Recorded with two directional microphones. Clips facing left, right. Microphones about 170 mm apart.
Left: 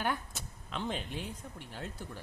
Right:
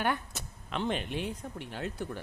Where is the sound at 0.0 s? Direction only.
65° right (ahead or behind).